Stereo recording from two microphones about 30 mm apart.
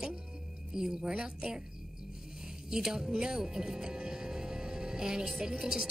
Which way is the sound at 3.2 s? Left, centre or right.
Right.